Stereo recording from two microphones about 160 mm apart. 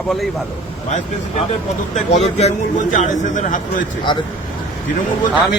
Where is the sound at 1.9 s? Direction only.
45° left (ahead or behind).